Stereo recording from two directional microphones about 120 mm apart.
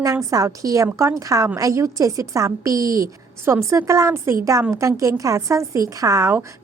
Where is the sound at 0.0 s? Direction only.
30° right (ahead or behind).